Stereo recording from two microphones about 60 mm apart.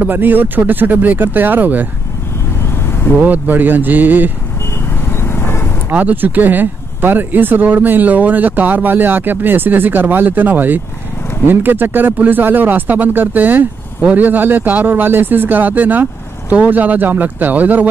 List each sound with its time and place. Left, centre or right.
0.0 s speech: right
3.2 s speech: right
5.0 s music: left
5.9 s speech: right